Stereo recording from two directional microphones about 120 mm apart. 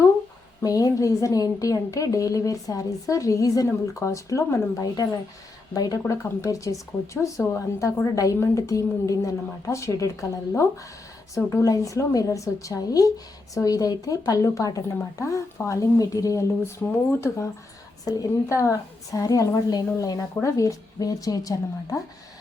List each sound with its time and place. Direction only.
0.6 s a woman's voice: 30° left (ahead or behind)
11.4 s a woman's voice: 25° left (ahead or behind)